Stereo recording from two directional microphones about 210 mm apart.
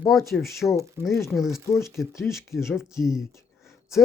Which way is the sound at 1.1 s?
15° left (ahead or behind).